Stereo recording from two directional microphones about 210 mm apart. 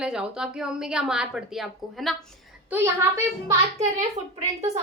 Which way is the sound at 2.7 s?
10° right (ahead or behind).